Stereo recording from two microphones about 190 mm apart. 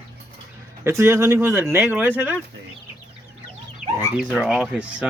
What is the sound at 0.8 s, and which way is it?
Speech, 15° right (ahead or behind).